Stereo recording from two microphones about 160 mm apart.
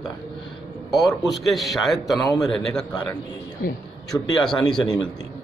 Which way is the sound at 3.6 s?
65° left (ahead or behind).